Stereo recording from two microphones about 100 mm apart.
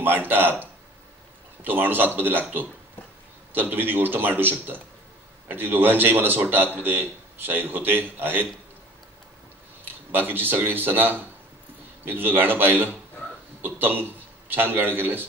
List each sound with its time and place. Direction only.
0.0 s a man's voice: 20° right (ahead or behind)
9.8 s a man's voice: 20° right (ahead or behind)